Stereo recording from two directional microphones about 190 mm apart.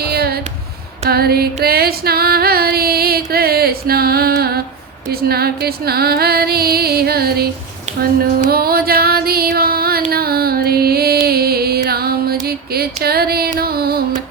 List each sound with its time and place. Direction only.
0.0 s a sound: 55° right (ahead or behind)
1.1 s music: 55° right (ahead or behind)
1.6 s female singing: 55° right (ahead or behind)
5.0 s music: 55° right (ahead or behind)